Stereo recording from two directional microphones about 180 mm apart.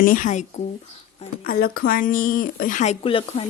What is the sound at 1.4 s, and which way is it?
Speech, 55° left (ahead or behind).